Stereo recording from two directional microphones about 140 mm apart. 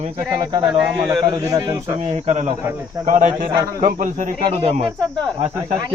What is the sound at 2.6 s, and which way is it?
Speech, 15° right (ahead or behind).